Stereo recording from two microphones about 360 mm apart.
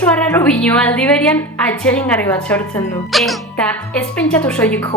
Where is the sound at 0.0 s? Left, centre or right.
Centre.